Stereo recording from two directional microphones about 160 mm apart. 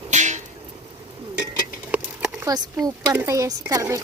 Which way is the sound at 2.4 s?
20° right (ahead or behind).